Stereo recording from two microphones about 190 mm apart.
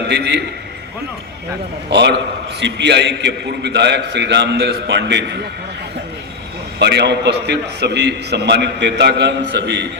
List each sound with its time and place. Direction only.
0.1 s a man's voice: 60° right (ahead or behind)
1.9 s a man's voice: 65° right (ahead or behind)
6.7 s a man's voice: 65° right (ahead or behind)